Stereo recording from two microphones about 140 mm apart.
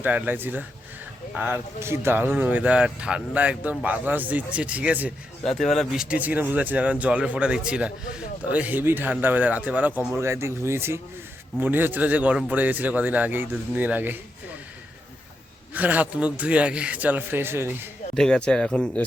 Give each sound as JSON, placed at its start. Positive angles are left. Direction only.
{"t": 0.0, "sound": "speech", "side_deg": -15}
{"t": 5.5, "sound": "a man's voice", "side_deg": 0}
{"t": 15.7, "sound": "speech", "side_deg": -10}
{"t": 18.2, "sound": "a man's voice", "side_deg": 5}